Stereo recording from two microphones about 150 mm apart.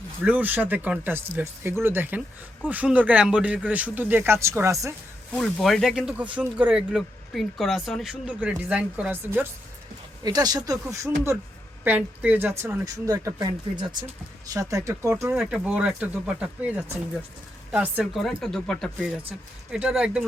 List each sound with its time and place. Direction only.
0.3 s speech: 10° right (ahead or behind)
5.4 s speech: centre (ahead or behind)
10.2 s speech: 25° right (ahead or behind)
12.8 s speech: 25° right (ahead or behind); by 20.2 s 5° right (ahead or behind)